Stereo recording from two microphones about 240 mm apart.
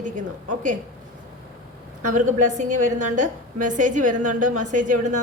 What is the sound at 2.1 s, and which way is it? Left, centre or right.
A woman's voice, right.